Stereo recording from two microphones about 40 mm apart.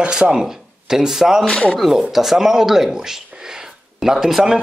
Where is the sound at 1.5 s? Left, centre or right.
Left.